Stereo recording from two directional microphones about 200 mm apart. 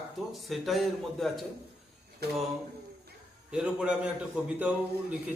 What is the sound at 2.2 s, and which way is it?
Speech, 50° right (ahead or behind).